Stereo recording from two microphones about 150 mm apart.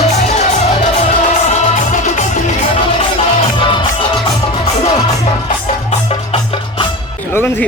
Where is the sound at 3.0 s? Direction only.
35° left (ahead or behind).